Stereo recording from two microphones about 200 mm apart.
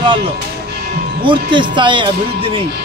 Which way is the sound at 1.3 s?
25° right (ahead or behind).